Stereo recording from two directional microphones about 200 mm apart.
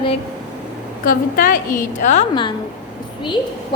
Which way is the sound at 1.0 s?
45° left (ahead or behind).